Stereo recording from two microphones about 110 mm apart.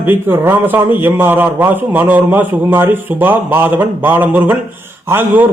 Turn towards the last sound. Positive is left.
turn(degrees=-20)  # may be behind; listen again after turning